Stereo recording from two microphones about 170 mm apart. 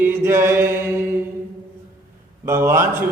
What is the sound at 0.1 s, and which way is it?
Speech, 15° right (ahead or behind).